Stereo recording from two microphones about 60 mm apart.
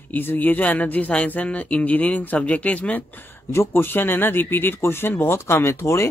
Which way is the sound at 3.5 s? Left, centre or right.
Left.